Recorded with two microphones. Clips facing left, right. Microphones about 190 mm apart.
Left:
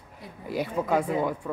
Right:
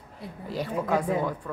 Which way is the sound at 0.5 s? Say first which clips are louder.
Left 1 dB; 10° left (ahead or behind).